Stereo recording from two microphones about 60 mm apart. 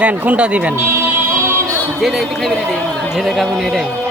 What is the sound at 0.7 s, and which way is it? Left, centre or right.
Music, right.